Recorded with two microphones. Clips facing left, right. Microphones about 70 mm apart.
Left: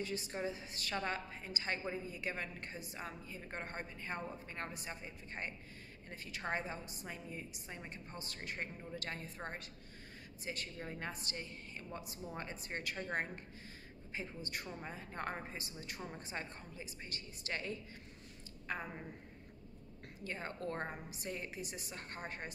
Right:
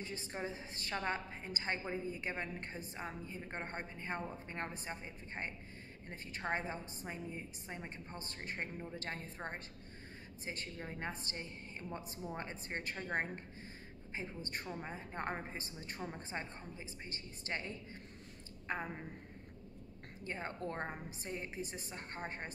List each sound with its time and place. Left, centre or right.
0.0 s a woman's voice: right
14.7 s a woman's voice: centre
20.2 s a woman's voice: right